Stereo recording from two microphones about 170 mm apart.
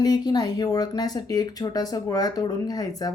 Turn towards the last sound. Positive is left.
turn(degrees=20)  # may be behind; listen again after turning